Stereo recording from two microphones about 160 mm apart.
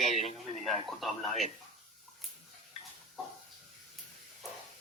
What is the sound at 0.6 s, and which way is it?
Speech, centre (ahead or behind).